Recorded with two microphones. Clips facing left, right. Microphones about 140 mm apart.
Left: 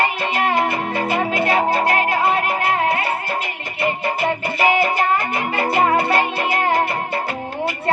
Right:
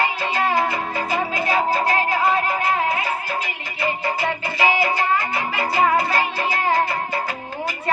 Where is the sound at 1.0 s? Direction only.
65° left (ahead or behind).